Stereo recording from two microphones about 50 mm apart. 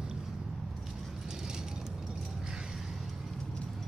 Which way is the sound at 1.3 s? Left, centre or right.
Centre.